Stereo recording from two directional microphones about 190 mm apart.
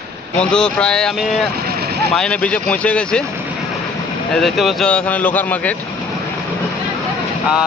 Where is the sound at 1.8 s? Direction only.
55° right (ahead or behind).